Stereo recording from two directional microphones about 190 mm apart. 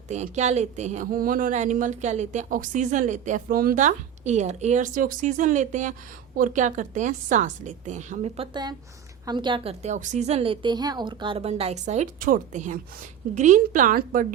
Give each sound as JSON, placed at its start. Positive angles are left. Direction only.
{"t": 0.1, "sound": "a woman's voice", "side_deg": -35}
{"t": 9.8, "sound": "a woman's voice", "side_deg": -40}